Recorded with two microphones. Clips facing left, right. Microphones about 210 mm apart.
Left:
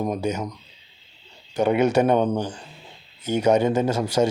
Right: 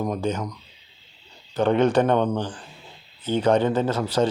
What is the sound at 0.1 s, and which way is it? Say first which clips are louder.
Speech: even; 10° left (ahead or behind).